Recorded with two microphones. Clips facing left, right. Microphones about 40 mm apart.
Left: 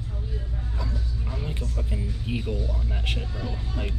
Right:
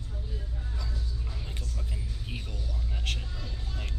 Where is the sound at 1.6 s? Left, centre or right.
Left.